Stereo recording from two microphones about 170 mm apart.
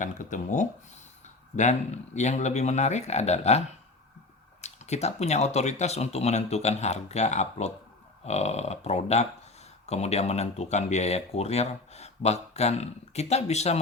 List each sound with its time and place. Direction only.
0.0 s speech: 50° left (ahead or behind)
4.6 s speech: 40° left (ahead or behind)